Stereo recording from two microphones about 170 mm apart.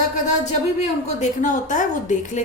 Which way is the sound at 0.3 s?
45° left (ahead or behind).